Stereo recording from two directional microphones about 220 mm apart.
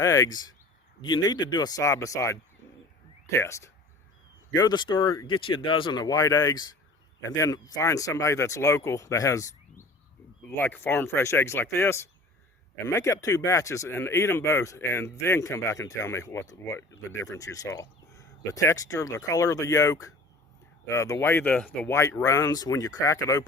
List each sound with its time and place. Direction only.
0.0 s speech: 15° left (ahead or behind)